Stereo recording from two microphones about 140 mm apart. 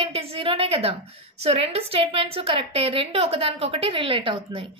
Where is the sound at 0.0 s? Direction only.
40° right (ahead or behind).